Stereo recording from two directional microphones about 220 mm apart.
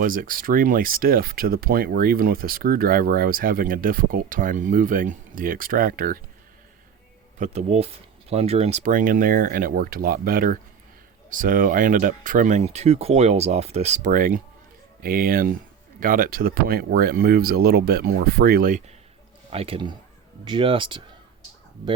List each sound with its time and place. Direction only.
0.0 s speech: 40° right (ahead or behind)
7.3 s speech: 30° right (ahead or behind)
19.5 s speech: 25° right (ahead or behind)